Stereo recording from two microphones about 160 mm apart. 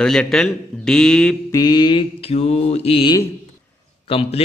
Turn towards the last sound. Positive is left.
turn(degrees=35)  # may be behind; listen again after turning